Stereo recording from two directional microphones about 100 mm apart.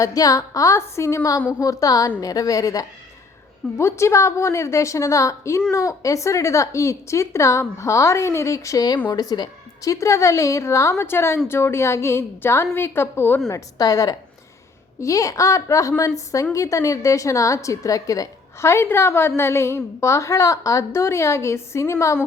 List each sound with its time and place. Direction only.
0.0 s a woman's voice: 40° left (ahead or behind)
13.5 s a woman's voice: 40° left (ahead or behind)